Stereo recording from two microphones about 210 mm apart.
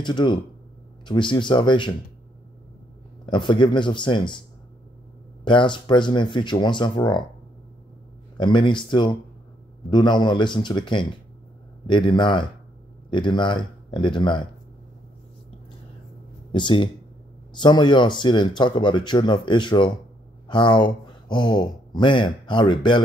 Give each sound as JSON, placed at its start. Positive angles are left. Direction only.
{"t": 0.0, "sound": "speech", "side_deg": 20}
{"t": 3.3, "sound": "speech", "side_deg": 20}
{"t": 5.4, "sound": "speech", "side_deg": 20}
{"t": 8.4, "sound": "speech", "side_deg": 20}
{"t": 16.5, "sound": "speech", "side_deg": 25}